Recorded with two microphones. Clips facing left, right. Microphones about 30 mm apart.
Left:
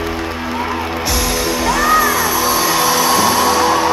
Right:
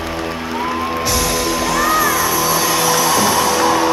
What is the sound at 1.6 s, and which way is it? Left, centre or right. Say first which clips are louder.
Music: left 3 dB; centre.